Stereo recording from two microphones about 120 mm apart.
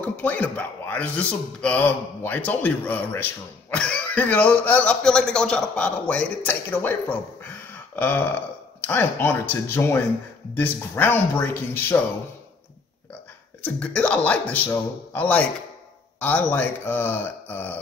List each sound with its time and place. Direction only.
0.0 s speech: 10° left (ahead or behind)
13.6 s speech: 10° left (ahead or behind)